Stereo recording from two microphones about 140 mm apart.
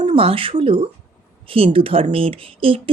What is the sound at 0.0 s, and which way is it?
Speech, 40° right (ahead or behind).